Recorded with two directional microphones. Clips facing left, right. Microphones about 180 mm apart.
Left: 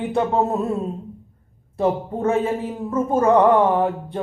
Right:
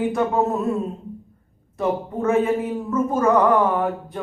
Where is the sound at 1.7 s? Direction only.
30° left (ahead or behind).